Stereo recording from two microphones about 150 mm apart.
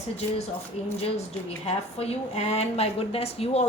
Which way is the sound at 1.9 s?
45° left (ahead or behind).